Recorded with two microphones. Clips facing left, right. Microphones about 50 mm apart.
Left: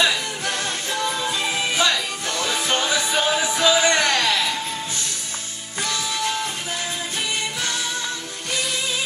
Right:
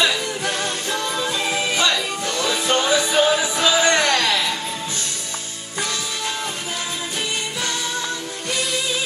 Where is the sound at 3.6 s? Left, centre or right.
Centre.